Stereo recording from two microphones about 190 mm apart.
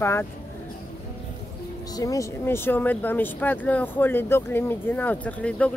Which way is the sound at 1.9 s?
20° left (ahead or behind).